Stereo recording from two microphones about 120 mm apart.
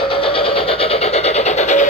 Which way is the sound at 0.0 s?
50° left (ahead or behind).